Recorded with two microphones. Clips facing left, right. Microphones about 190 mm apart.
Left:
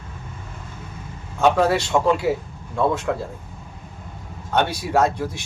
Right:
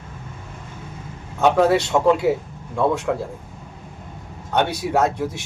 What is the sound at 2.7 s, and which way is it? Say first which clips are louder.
Speech: right 1 dB; 15° right (ahead or behind).